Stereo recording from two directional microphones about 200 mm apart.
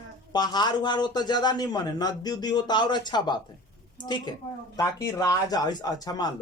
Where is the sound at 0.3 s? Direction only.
20° left (ahead or behind).